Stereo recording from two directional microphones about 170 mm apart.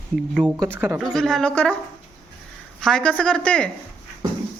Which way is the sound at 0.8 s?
5° right (ahead or behind).